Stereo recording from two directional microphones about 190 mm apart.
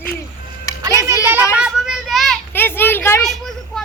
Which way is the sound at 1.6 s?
5° right (ahead or behind).